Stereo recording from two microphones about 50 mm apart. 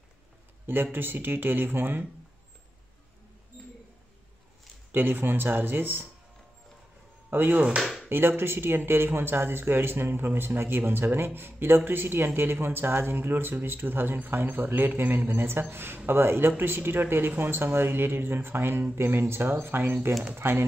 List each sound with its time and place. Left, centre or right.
0.9 s speech: right
4.9 s speech: right
7.2 s speech: right
7.8 s a sound: centre
8.1 s speech: right